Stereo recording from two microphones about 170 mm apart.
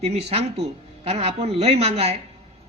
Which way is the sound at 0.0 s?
40° right (ahead or behind).